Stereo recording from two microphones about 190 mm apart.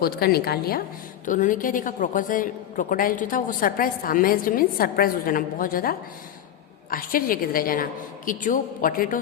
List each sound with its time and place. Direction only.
0.0 s a woman's voice: 55° left (ahead or behind)